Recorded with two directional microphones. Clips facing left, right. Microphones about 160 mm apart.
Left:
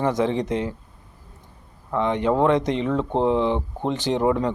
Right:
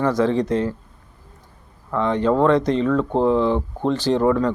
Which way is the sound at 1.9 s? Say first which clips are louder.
Right 2 dB; 20° left (ahead or behind).